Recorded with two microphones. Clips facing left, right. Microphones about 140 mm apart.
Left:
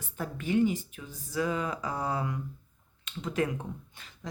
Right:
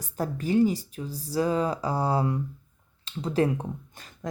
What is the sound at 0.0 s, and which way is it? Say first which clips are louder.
Speech: right 6 dB; 35° right (ahead or behind).